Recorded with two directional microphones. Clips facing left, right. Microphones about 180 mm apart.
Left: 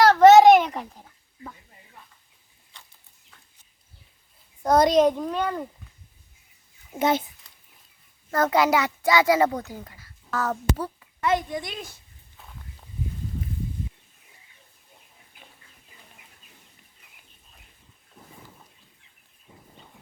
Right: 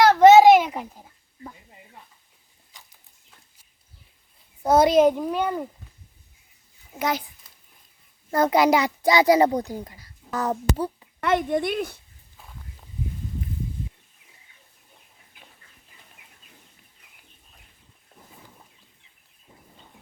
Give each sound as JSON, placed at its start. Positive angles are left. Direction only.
{"t": 0.1, "sound": "a sound", "side_deg": -10}
{"t": 4.6, "sound": "a child's voice", "side_deg": -5}
{"t": 7.0, "sound": "a child's voice", "side_deg": 25}
{"t": 8.3, "sound": "a child's voice", "side_deg": -15}
{"t": 10.8, "sound": "a sound", "side_deg": -20}
{"t": 11.2, "sound": "speech", "side_deg": -55}